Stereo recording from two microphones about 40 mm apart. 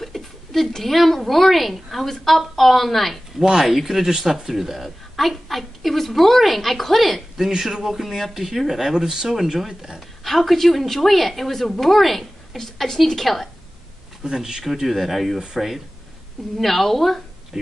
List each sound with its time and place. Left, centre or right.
0.0 s a woman's voice: centre
9.9 s a woman's voice: centre
14.2 s speech: centre
14.6 s a woman's voice: centre
16.5 s a woman's voice: centre